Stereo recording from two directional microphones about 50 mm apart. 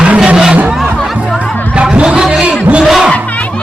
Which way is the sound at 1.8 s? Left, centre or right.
Centre.